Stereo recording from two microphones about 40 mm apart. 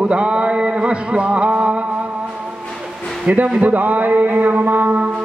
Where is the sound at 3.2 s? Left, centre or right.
Right.